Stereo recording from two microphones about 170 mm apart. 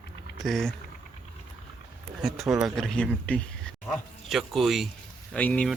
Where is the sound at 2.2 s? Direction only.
Centre (ahead or behind).